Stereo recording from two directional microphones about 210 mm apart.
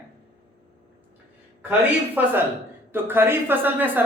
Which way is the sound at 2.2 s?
10° right (ahead or behind).